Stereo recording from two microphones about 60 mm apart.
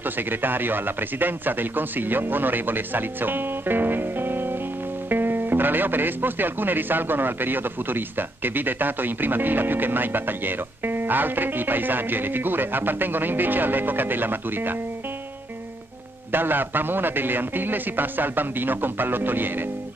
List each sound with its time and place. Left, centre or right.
0.3 s speech: right
16.3 s speech: right